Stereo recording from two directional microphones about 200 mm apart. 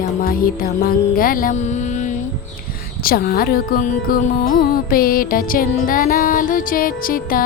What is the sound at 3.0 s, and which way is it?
Music, 50° left (ahead or behind).